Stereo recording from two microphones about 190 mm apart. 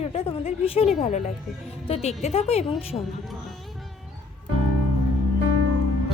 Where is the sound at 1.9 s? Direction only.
35° left (ahead or behind).